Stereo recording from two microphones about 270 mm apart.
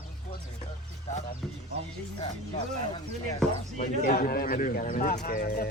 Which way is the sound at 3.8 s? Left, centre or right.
Left.